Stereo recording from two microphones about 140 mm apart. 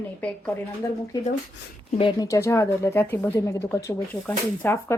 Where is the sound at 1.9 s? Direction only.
40° left (ahead or behind).